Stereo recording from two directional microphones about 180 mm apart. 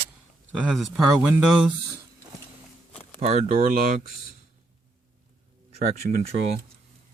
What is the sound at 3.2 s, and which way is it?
Speech, 35° right (ahead or behind).